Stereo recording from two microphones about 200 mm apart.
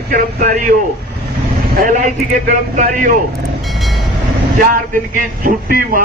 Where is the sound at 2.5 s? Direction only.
40° right (ahead or behind).